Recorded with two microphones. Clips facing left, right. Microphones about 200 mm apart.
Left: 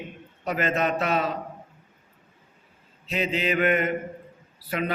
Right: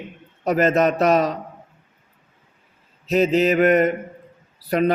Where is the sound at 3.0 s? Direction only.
40° right (ahead or behind).